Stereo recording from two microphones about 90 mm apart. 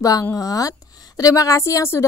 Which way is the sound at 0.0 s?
40° left (ahead or behind).